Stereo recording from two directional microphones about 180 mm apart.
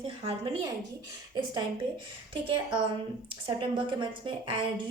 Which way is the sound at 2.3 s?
30° right (ahead or behind).